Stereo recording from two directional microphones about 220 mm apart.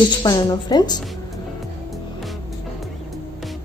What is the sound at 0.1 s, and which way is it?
Speech, 20° left (ahead or behind).